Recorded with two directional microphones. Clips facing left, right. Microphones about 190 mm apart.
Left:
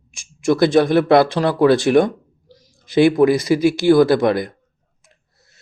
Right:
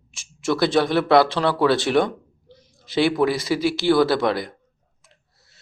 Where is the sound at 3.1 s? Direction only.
20° left (ahead or behind).